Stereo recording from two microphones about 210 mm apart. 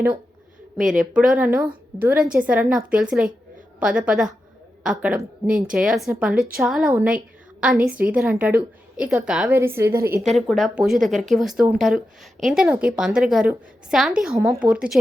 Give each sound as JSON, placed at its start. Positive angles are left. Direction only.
{"t": 0.9, "sound": "a woman's voice", "side_deg": -5}
{"t": 5.5, "sound": "a woman's voice", "side_deg": -40}
{"t": 5.7, "sound": "speech", "side_deg": -5}
{"t": 7.9, "sound": "a woman's voice", "side_deg": -45}
{"t": 8.1, "sound": "a woman's voice", "side_deg": -10}
{"t": 9.9, "sound": "a woman's voice", "side_deg": -45}
{"t": 10.2, "sound": "a woman's voice", "side_deg": 0}